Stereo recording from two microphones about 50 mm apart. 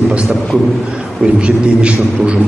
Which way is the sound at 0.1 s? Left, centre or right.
Right.